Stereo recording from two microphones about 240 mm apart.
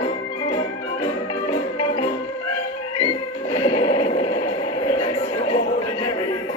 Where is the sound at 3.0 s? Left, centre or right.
Left.